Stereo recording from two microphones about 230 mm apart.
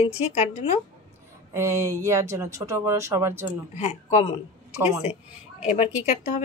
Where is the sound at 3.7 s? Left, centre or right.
Left.